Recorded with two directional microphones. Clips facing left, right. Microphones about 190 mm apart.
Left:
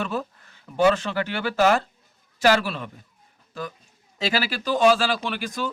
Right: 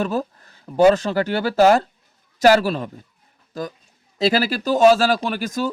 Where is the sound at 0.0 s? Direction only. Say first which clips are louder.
Right 5 dB; 40° right (ahead or behind).